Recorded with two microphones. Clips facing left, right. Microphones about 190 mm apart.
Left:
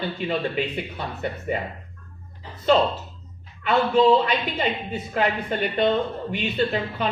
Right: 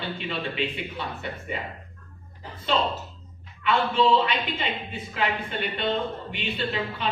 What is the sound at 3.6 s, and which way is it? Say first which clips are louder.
Speech: left 4 dB; 45° left (ahead or behind).